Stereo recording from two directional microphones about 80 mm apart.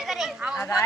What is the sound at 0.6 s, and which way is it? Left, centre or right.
Speech, left.